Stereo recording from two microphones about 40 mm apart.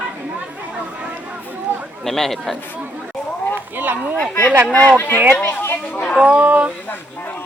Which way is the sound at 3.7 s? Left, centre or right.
Right.